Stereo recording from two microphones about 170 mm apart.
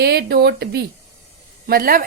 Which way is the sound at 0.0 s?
70° right (ahead or behind).